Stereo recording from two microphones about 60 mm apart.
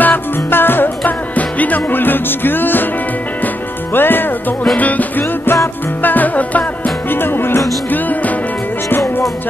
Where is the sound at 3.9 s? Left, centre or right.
Left.